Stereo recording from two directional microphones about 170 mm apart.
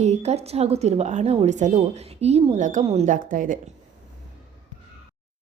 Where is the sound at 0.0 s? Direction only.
40° right (ahead or behind).